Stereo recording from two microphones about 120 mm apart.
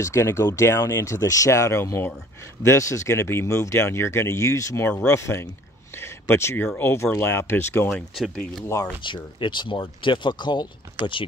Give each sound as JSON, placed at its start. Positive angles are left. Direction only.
{"t": 0.0, "sound": "speech", "side_deg": 25}
{"t": 7.9, "sound": "speech", "side_deg": 0}
{"t": 9.0, "sound": "speech", "side_deg": 40}